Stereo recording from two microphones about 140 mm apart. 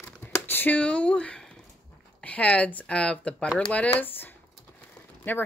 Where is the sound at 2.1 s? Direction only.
10° left (ahead or behind).